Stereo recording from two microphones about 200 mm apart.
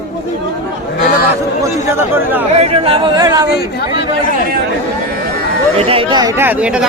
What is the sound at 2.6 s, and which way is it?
Speech, 30° right (ahead or behind).